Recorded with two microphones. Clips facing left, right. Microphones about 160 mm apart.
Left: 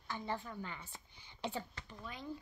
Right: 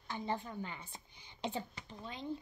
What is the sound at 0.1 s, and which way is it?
A woman's voice, 20° right (ahead or behind).